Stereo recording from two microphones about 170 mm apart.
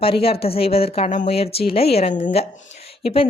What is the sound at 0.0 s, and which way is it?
A woman's voice, 35° left (ahead or behind).